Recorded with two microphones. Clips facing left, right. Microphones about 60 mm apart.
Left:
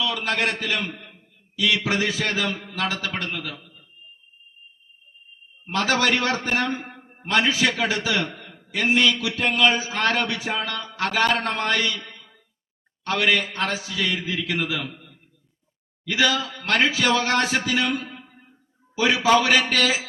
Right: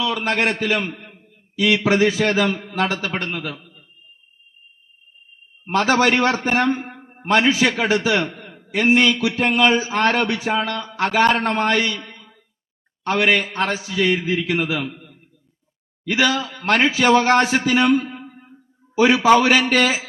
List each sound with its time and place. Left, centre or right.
0.0 s a man's voice: right
5.6 s a man's voice: right